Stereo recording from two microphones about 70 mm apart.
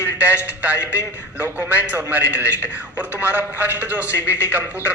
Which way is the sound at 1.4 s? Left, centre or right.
Right.